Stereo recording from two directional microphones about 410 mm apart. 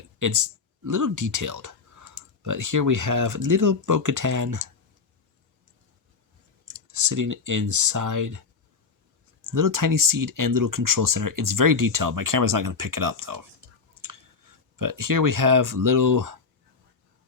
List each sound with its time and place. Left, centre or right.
0.2 s speech: right
6.8 s speech: right
9.5 s speech: right